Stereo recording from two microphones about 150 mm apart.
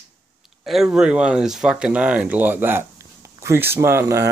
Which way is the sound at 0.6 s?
Centre (ahead or behind).